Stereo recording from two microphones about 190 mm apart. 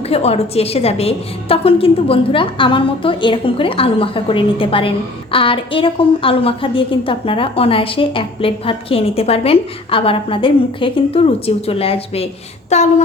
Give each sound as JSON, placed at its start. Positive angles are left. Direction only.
{"t": 0.1, "sound": "a woman's voice", "side_deg": 35}